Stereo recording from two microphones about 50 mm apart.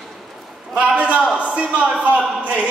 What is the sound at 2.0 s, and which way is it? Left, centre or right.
Speech, right.